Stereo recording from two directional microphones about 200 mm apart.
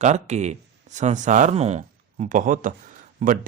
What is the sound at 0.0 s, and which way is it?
Speech, 35° right (ahead or behind).